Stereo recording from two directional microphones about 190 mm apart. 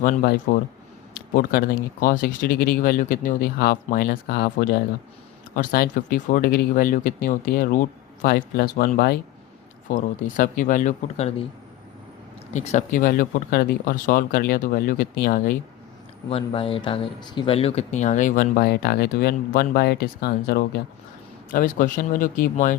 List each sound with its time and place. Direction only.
0.0 s speech: 50° left (ahead or behind)
9.9 s speech: 45° left (ahead or behind)
12.5 s speech: 40° left (ahead or behind)
16.3 s speech: 30° left (ahead or behind)